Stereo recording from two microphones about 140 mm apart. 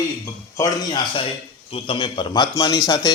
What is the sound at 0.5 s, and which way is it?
A man's voice, 30° left (ahead or behind).